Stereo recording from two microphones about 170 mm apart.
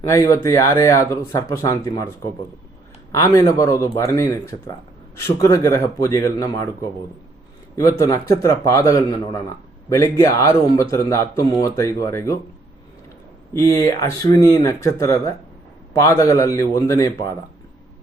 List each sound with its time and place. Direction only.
0.0 s speech: 20° left (ahead or behind)
3.1 s speech: 20° left (ahead or behind)
7.8 s speech: 20° left (ahead or behind)
13.5 s speech: 15° left (ahead or behind)